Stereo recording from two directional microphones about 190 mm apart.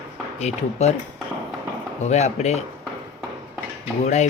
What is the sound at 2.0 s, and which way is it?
Speech, 35° left (ahead or behind).